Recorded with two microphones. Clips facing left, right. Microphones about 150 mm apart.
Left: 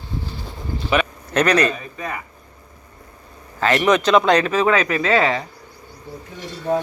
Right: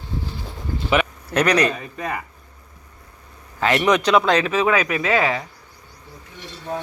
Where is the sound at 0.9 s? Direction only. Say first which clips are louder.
Even; 15° right (ahead or behind).